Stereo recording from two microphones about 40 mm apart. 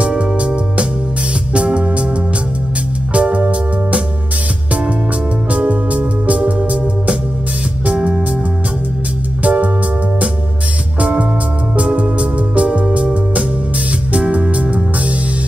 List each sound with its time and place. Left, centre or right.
0.4 s music: right
3.1 s music: right
5.7 s music: right
9.4 s music: right
11.0 s music: right